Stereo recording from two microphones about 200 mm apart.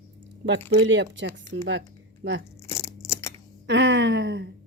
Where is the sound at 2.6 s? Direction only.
15° left (ahead or behind).